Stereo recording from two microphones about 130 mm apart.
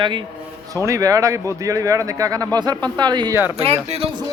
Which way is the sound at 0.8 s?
25° right (ahead or behind).